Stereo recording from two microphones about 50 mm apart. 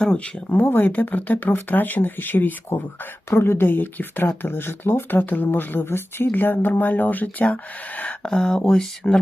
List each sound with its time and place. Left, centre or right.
0.0 s speech: centre
0.6 s speech: left
3.2 s speech: left
8.2 s speech: centre